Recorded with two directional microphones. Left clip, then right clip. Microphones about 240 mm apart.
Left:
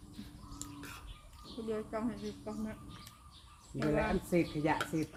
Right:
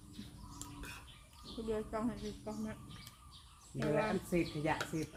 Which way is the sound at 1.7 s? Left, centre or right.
Centre.